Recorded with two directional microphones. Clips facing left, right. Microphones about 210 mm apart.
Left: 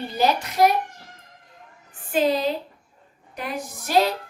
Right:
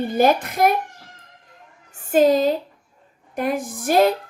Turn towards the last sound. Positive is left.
turn(degrees=-50)  # may be behind; listen again after turning